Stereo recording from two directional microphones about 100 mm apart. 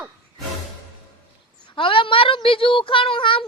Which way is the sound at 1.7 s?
60° left (ahead or behind).